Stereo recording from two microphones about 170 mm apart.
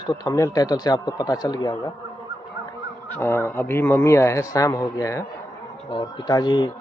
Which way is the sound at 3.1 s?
15° left (ahead or behind).